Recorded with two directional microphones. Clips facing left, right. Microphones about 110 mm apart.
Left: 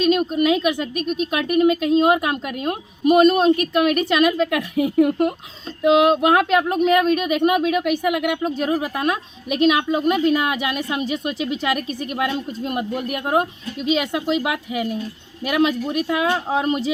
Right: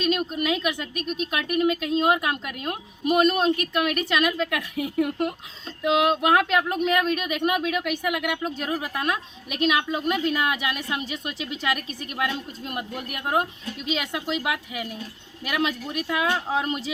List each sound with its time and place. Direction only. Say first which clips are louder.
0.0 s speech: left 7 dB; 15° left (ahead or behind)